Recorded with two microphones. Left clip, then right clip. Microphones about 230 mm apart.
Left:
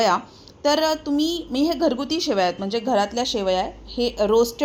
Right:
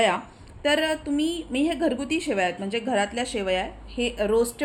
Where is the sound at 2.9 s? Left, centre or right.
Left.